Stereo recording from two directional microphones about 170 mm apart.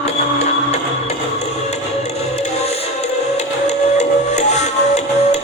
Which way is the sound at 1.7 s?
40° left (ahead or behind).